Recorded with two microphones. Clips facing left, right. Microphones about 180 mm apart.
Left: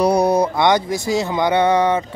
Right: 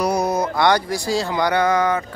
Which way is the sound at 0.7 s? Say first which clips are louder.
Left 2 dB; 20° left (ahead or behind).